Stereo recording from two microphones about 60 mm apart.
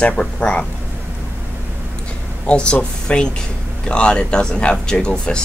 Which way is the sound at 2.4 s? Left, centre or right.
Centre.